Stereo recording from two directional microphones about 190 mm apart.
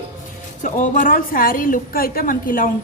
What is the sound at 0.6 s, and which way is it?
A woman's voice, 45° left (ahead or behind).